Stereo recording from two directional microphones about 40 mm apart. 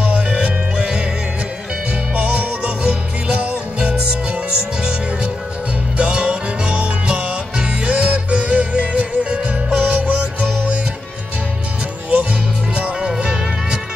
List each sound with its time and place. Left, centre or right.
0.7 s music: right
2.1 s music: right
5.9 s music: right
12.7 s music: right